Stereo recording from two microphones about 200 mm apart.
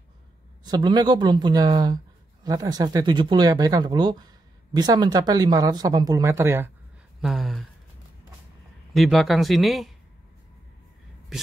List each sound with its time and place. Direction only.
0.7 s speech: 20° right (ahead or behind)
7.2 s a sound: centre (ahead or behind)
8.9 s speech: centre (ahead or behind)